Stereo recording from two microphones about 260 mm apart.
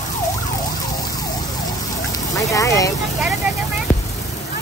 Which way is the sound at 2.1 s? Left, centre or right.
Centre.